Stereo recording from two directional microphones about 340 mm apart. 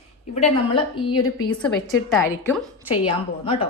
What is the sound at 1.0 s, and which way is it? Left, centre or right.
A woman's voice, centre.